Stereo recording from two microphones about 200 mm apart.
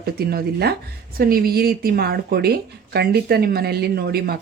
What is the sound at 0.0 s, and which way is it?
Speech, 50° right (ahead or behind).